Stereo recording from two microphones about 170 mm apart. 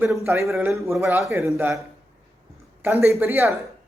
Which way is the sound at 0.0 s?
15° right (ahead or behind).